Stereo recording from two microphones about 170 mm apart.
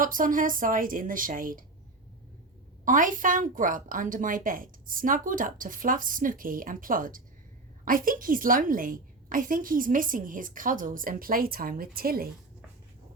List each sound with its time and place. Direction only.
0.0 s a woman's voice: 50° right (ahead or behind)
2.8 s a woman's voice: 50° right (ahead or behind)